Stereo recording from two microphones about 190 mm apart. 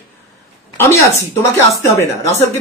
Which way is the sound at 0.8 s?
15° left (ahead or behind).